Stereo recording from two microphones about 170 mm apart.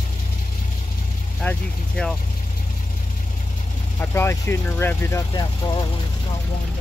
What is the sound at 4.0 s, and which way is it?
Speech, 15° left (ahead or behind).